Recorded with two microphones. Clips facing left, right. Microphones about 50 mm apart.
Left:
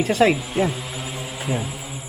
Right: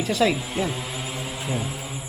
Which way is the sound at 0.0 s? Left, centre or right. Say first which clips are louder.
Left 4 dB; left.